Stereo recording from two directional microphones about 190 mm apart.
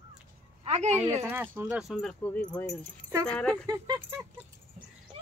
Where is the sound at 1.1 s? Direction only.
10° right (ahead or behind); by 3.6 s 5° left (ahead or behind).